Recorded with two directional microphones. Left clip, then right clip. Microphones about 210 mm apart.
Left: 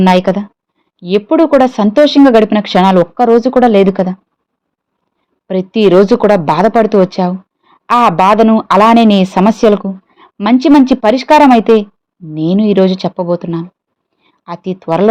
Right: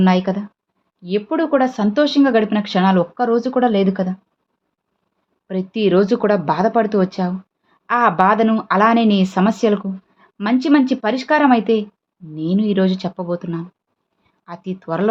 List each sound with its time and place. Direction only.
0.0 s speech: 35° left (ahead or behind)
5.5 s a woman's voice: 30° left (ahead or behind)